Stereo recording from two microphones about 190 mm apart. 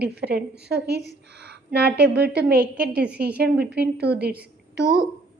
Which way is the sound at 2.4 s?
55° right (ahead or behind).